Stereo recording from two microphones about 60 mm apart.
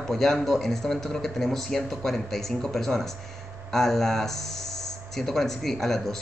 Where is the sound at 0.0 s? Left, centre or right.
Centre.